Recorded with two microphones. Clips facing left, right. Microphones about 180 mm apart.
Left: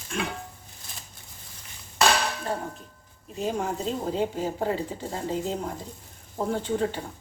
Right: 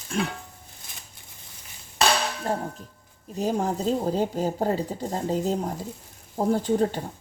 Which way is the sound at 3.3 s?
40° right (ahead or behind).